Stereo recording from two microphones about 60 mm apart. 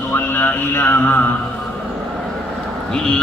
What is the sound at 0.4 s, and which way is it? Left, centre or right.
Mantra, left.